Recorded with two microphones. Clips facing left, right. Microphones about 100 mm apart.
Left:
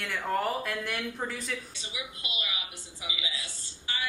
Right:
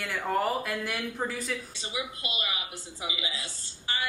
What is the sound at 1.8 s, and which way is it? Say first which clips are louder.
A woman's voice: right 5 dB; 40° right (ahead or behind).